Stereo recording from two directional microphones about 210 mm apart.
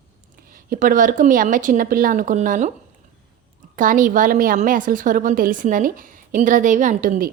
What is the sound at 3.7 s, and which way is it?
A woman's voice, 40° right (ahead or behind).